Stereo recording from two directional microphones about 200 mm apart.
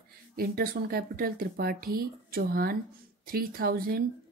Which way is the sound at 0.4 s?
50° right (ahead or behind).